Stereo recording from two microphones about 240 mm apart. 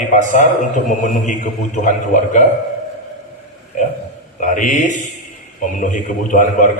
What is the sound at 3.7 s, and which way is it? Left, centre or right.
A man's voice, left.